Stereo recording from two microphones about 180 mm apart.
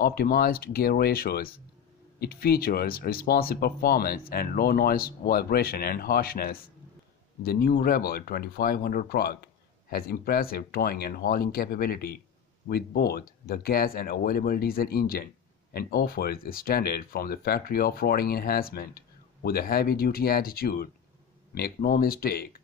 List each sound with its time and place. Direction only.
0.0 s speech: 55° left (ahead or behind)